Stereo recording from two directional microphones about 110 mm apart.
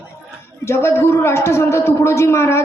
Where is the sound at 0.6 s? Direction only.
25° left (ahead or behind).